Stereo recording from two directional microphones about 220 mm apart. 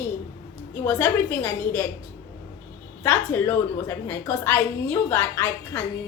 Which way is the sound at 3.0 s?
10° left (ahead or behind).